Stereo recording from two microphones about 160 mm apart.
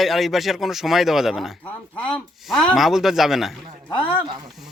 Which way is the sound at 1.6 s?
10° left (ahead or behind).